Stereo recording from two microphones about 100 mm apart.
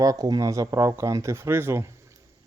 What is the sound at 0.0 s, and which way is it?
Speech, 35° right (ahead or behind).